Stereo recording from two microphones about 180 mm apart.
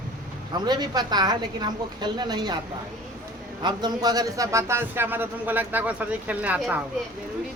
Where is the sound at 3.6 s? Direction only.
25° right (ahead or behind).